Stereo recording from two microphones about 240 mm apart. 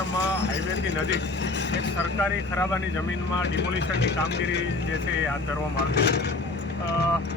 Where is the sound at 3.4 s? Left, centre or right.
Left.